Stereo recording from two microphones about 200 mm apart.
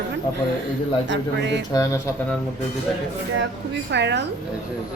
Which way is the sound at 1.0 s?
65° right (ahead or behind).